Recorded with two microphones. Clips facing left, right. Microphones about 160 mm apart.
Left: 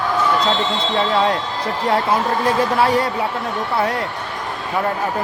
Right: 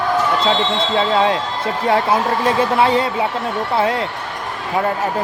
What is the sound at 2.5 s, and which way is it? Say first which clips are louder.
Speech: right 2 dB; 20° right (ahead or behind).